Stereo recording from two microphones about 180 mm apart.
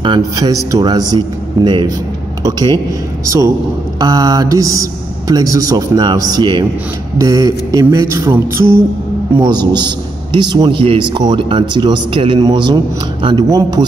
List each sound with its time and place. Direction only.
0.0 s a man's voice: 25° right (ahead or behind)
3.3 s mantra: 15° right (ahead or behind)
4.0 s a man's voice: 20° right (ahead or behind)
7.2 s mantra: 20° right (ahead or behind)
9.4 s a man's voice: 25° right (ahead or behind)